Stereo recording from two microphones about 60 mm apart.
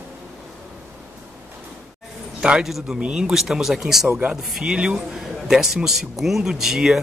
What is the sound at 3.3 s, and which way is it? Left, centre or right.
A man's voice, centre.